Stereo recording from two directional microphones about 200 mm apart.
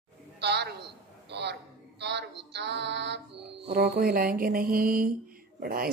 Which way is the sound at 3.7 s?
55° right (ahead or behind).